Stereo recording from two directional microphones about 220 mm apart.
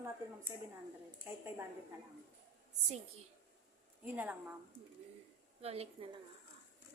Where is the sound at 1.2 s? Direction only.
10° right (ahead or behind).